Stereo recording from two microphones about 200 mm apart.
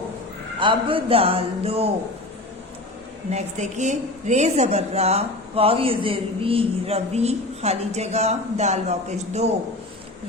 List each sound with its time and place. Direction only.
0.6 s speech: 25° right (ahead or behind)
3.2 s a woman's voice: 35° right (ahead or behind)